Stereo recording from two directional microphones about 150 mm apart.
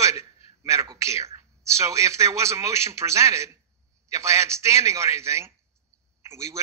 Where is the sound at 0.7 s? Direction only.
20° right (ahead or behind).